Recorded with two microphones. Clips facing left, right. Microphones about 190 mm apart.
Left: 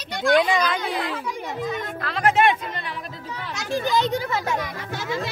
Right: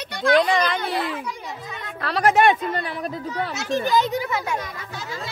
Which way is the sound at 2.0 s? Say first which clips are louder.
Right 3 dB; 40° right (ahead or behind).